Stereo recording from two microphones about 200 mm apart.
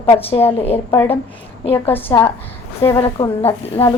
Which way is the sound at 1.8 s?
10° left (ahead or behind).